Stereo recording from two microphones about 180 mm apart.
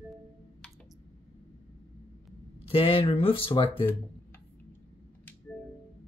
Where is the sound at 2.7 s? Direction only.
30° left (ahead or behind).